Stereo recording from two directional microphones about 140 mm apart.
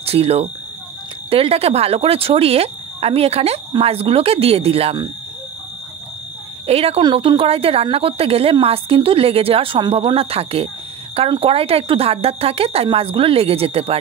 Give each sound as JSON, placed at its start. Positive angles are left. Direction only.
{"t": 0.0, "sound": "speech", "side_deg": -45}
{"t": 6.6, "sound": "speech", "side_deg": -45}
{"t": 7.0, "sound": "speech", "side_deg": -35}